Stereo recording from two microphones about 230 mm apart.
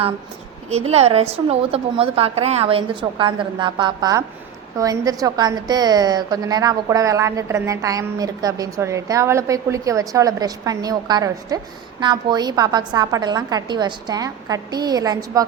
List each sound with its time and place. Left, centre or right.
0.7 s a woman's voice: right